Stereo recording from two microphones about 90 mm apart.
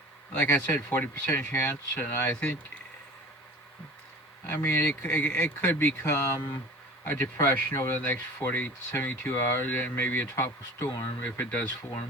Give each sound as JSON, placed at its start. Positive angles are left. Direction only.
{"t": 0.3, "sound": "speech", "side_deg": 20}
{"t": 4.4, "sound": "speech", "side_deg": 25}
{"t": 7.3, "sound": "speech", "side_deg": 35}
{"t": 8.1, "sound": "speech", "side_deg": 20}
{"t": 11.0, "sound": "speech", "side_deg": 20}